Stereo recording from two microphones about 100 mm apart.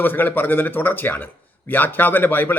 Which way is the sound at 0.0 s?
20° left (ahead or behind).